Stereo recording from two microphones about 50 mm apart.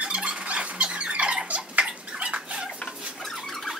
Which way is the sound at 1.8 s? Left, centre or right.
Right.